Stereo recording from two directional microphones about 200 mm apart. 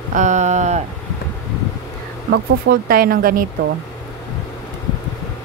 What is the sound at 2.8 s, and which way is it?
Speech, 45° right (ahead or behind).